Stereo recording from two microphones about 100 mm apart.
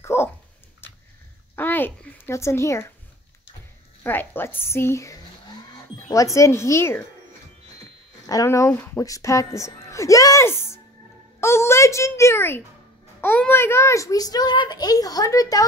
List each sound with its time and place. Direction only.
0.0 s dog: 25° left (ahead or behind)
1.5 s a sound: 20° left (ahead or behind)
4.0 s a woman's voice: 20° left (ahead or behind)
8.3 s a woman's voice: 35° left (ahead or behind)